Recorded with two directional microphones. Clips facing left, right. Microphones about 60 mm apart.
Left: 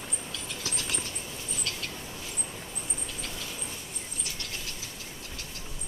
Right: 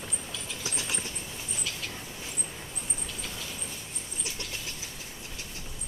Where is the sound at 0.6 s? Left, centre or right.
Centre.